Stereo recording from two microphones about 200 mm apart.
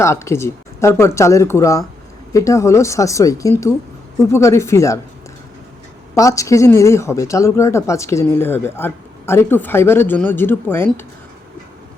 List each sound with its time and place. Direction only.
0.0 s speech: 15° left (ahead or behind)
6.1 s speech: 15° left (ahead or behind)